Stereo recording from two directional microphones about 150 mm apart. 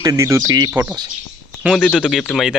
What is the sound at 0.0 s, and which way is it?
Speech, 20° right (ahead or behind).